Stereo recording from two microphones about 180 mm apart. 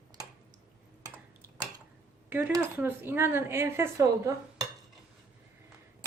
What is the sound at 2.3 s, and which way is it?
A woman's voice, 10° right (ahead or behind).